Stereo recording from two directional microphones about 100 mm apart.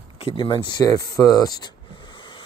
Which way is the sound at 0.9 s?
35° left (ahead or behind).